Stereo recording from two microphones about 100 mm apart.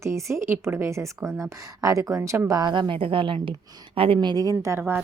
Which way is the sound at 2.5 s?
45° right (ahead or behind).